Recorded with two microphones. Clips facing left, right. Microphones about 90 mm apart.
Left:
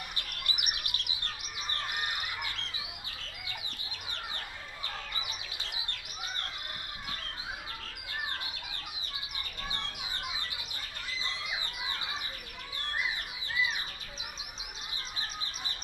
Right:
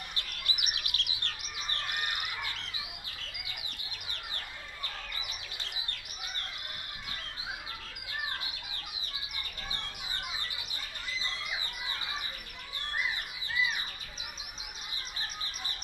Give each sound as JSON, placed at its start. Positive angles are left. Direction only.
{"t": 0.2, "sound": "chirp", "side_deg": 60}
{"t": 1.9, "sound": "bird", "side_deg": 0}
{"t": 4.8, "sound": "chirp", "side_deg": 5}